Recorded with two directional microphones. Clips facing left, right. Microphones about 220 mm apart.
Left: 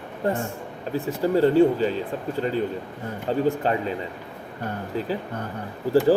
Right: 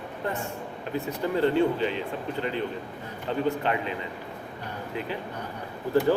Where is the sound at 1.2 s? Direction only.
35° left (ahead or behind).